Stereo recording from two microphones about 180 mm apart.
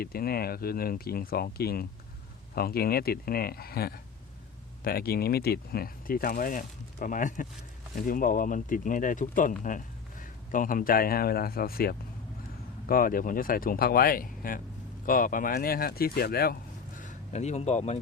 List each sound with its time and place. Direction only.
0.0 s speech: 55° left (ahead or behind)
17.0 s speech: 40° left (ahead or behind)